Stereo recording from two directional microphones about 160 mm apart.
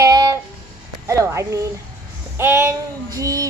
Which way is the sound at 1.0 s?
20° right (ahead or behind).